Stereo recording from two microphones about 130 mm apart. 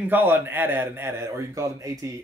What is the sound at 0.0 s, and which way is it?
Speech, 15° right (ahead or behind).